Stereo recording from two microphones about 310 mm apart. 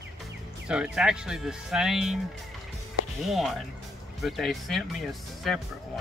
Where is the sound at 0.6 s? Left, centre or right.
Centre.